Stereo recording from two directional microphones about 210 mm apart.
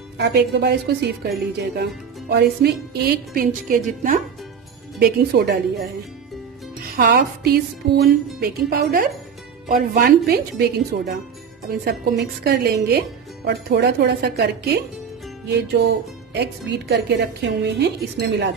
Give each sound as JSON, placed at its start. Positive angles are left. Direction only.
{"t": 0.2, "sound": "speech", "side_deg": -50}
{"t": 4.9, "sound": "speech", "side_deg": -50}